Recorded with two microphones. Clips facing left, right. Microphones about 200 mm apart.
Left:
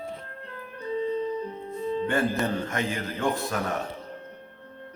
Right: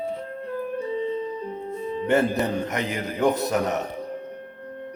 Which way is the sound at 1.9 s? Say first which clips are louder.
Right 4 dB; 20° right (ahead or behind).